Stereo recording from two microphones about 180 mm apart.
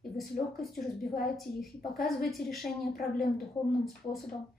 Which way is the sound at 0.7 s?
55° left (ahead or behind).